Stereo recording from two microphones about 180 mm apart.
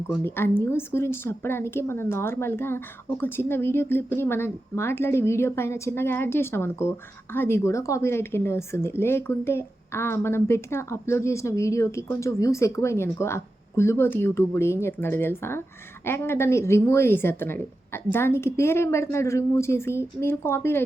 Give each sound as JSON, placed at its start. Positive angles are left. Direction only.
{"t": 0.2, "sound": "a woman's voice", "side_deg": 10}